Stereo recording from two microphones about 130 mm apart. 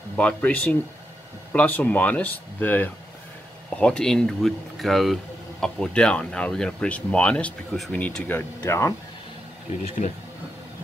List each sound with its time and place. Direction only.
0.1 s speech: 10° left (ahead or behind)
10.0 s speech: 60° left (ahead or behind)